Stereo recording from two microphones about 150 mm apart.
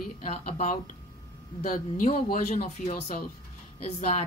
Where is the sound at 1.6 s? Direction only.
65° left (ahead or behind).